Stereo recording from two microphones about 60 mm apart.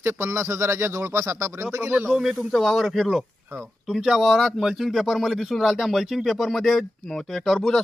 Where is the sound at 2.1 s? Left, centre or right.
Centre.